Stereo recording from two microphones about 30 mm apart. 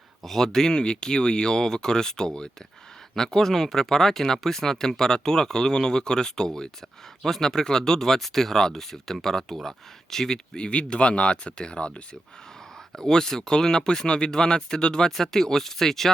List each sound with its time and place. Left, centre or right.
0.2 s speech: centre
7.3 s speech: centre
10.2 s speech: left
10.7 s speech: left
13.0 s speech: centre
15.1 s speech: centre